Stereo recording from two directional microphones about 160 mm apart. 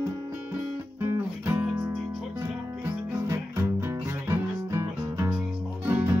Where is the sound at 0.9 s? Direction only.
15° right (ahead or behind).